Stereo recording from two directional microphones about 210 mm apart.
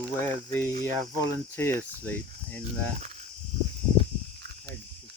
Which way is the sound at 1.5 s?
10° left (ahead or behind).